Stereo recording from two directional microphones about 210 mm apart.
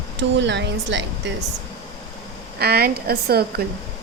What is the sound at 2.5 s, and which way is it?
A woman's voice, 50° right (ahead or behind).